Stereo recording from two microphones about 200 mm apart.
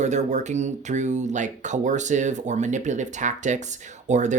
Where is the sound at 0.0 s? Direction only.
35° right (ahead or behind).